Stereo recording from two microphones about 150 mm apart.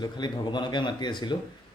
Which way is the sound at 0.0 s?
30° left (ahead or behind).